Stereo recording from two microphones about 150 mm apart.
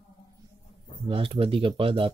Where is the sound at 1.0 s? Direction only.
35° right (ahead or behind).